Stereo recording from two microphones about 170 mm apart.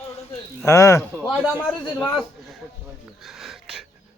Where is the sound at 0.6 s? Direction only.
20° left (ahead or behind).